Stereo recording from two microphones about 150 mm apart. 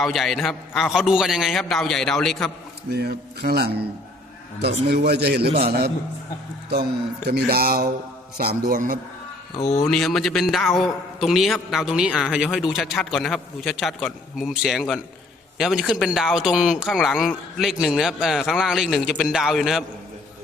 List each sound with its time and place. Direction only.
0.0 s speech: centre (ahead or behind)
2.9 s a man's voice: 90° right
7.3 s a man's voice: 90° right; by 9.0 s 70° right (ahead or behind)
9.6 s speech: 45° left (ahead or behind)
9.8 s speech: 5° left (ahead or behind)